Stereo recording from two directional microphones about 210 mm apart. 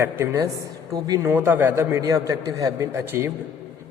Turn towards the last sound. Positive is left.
turn(degrees=-10)  # may be behind; listen again after turning